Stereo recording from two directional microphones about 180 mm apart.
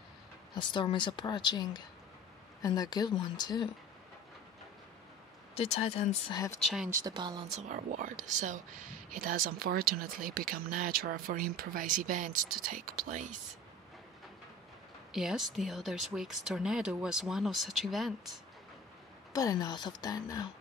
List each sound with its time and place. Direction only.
0.6 s speech: 25° left (ahead or behind)
5.6 s speech: 35° left (ahead or behind)
6.3 s speech: 20° left (ahead or behind)
6.6 s speech: centre (ahead or behind)
6.9 s speech: 20° right (ahead or behind)
7.5 s speech: 40° right (ahead or behind)
15.1 s speech: centre (ahead or behind)
19.3 s speech: 20° left (ahead or behind)